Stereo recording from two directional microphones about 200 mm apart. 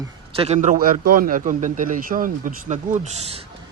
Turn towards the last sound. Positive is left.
turn(degrees=-35)  # may be behind; listen again after turning